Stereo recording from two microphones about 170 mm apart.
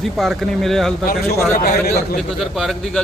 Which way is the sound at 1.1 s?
65° left (ahead or behind).